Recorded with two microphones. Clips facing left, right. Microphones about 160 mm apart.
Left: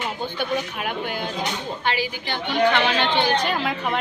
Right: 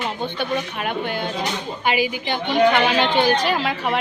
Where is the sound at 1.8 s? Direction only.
15° right (ahead or behind).